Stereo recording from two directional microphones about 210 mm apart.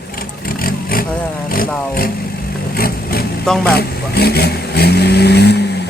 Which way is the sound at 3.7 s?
50° left (ahead or behind).